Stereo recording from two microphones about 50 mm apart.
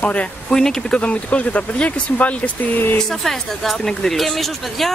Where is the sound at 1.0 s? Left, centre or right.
Left.